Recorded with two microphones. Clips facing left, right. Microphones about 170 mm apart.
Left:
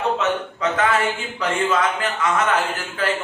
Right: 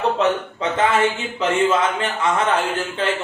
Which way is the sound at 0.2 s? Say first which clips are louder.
Right 2 dB; 30° right (ahead or behind).